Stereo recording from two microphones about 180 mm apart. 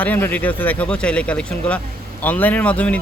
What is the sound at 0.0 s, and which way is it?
Speech, 10° left (ahead or behind).